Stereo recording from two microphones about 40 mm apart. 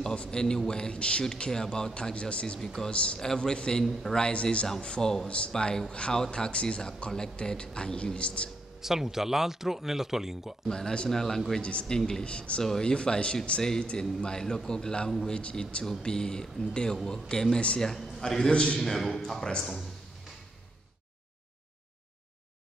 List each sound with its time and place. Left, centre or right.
0.0 s a man's voice: left
2.1 s speech: left
2.6 s a man's voice: centre
2.9 s speech: left
5.0 s a man's voice: centre; by 8.5 s left
8.8 s speech: centre
10.7 s a man's voice: centre
11.6 s a man's voice: left; by 18.5 s centre
18.5 s speech: left
18.8 s a man's voice: centre